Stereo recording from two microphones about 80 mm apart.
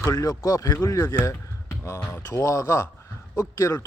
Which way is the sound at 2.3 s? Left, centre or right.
Left.